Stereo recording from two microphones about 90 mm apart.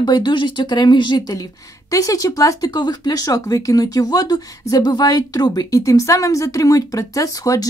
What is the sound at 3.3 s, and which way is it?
Speech, 40° left (ahead or behind).